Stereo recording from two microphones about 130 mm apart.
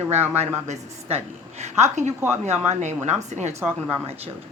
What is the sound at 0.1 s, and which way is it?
A woman's voice, 55° right (ahead or behind).